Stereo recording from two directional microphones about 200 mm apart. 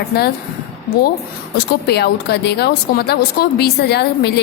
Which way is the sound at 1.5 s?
55° left (ahead or behind).